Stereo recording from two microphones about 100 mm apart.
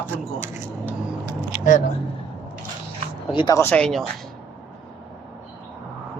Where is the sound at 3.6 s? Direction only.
10° left (ahead or behind).